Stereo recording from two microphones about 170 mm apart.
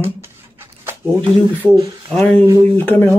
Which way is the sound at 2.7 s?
10° left (ahead or behind).